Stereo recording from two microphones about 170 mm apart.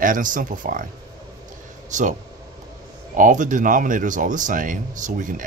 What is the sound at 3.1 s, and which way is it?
Speech, 50° right (ahead or behind).